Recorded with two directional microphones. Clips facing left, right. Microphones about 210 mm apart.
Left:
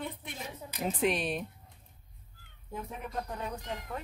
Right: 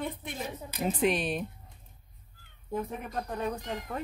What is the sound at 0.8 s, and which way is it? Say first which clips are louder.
Speech: right 2 dB; centre (ahead or behind).